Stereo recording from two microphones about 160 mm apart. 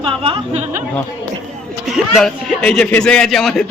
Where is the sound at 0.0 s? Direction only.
35° right (ahead or behind).